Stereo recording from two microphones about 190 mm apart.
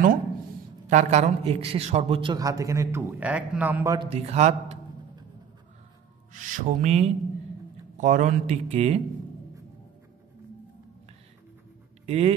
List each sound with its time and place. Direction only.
0.8 s a man's voice: 35° right (ahead or behind); by 4.1 s 15° right (ahead or behind)
4.1 s speech: 35° right (ahead or behind)
6.3 s speech: 45° right (ahead or behind)
12.1 s speech: 35° right (ahead or behind)